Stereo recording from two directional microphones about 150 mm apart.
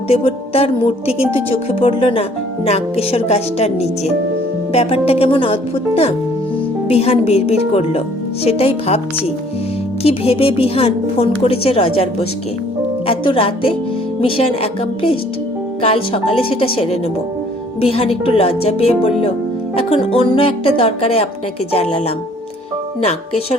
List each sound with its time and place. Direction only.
0.1 s a woman's voice: 40° left (ahead or behind)
13.1 s a woman's voice: 35° left (ahead or behind)